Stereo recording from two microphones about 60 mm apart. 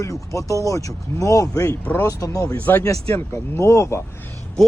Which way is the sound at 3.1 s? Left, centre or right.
Left.